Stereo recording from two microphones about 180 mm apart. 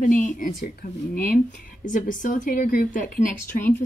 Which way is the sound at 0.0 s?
45° left (ahead or behind).